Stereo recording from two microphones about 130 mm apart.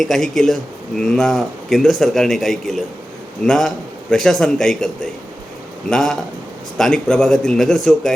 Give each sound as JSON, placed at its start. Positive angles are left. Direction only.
{"t": 0.0, "sound": "speech", "side_deg": 5}
{"t": 5.9, "sound": "speech", "side_deg": 5}